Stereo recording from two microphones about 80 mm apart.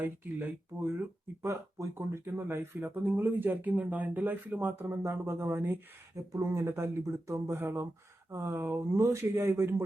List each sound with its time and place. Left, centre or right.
0.0 s speech: right
4.8 s speech: right
6.1 s speech: right
7.3 s speech: right
7.5 s speech: right